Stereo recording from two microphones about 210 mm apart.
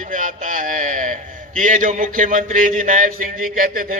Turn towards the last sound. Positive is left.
turn(degrees=-40)  # may be behind; listen again after turning